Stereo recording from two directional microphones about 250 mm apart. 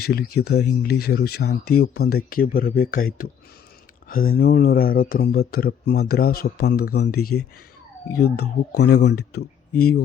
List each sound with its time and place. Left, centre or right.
0.0 s speech: left
4.1 s speech: left